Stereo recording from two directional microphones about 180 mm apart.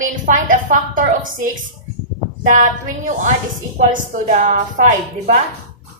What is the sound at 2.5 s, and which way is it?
Speech, 45° right (ahead or behind).